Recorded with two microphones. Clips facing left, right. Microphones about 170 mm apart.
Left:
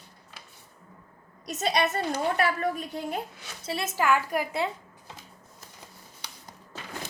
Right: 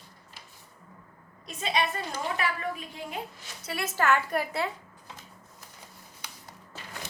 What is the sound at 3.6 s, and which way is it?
Speech, 25° left (ahead or behind).